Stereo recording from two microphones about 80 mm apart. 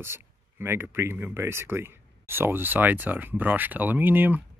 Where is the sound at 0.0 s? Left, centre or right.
Right.